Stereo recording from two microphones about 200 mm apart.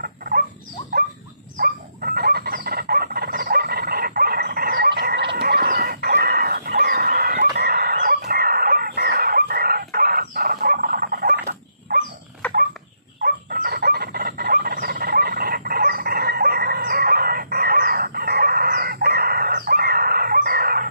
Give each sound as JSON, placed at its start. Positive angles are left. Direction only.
{"t": 1.6, "sound": "chicken", "side_deg": -50}
{"t": 11.9, "sound": "dog", "side_deg": -55}
{"t": 13.2, "sound": "chicken", "side_deg": -45}